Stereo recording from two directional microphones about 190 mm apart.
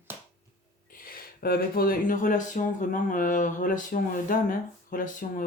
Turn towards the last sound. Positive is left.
turn(degrees=45)  # may be behind; listen again after turning